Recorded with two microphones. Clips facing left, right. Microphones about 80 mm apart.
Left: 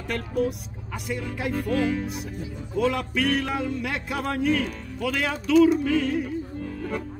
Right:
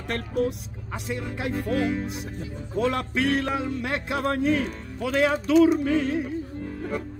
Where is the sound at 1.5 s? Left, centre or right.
Right.